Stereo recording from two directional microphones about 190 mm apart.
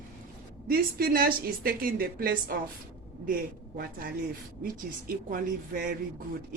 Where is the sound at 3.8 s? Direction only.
50° right (ahead or behind).